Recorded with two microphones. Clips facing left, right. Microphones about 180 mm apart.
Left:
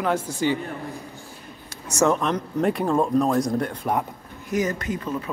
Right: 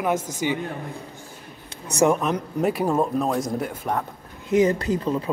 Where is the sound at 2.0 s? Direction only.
10° right (ahead or behind).